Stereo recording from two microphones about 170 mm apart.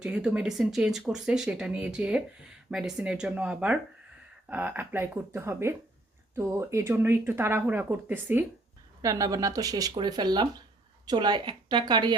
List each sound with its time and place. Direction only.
0.0 s speech: 5° right (ahead or behind); by 12.1 s 25° right (ahead or behind)